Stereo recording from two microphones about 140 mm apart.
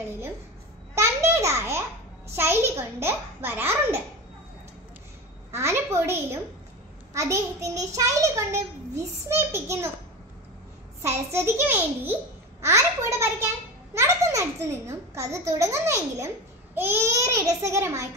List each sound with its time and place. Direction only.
0.9 s a child's voice: 20° right (ahead or behind)
5.5 s a child's voice: 20° right (ahead or behind)
11.3 s a child's voice: 15° right (ahead or behind)